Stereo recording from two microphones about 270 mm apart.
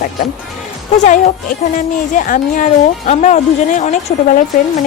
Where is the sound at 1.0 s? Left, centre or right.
Left.